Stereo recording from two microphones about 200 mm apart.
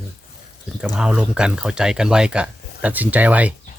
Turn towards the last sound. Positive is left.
turn(degrees=-5)  # may be behind; listen again after turning